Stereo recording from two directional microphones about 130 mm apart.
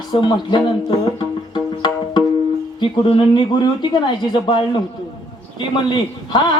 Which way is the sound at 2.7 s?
35° left (ahead or behind).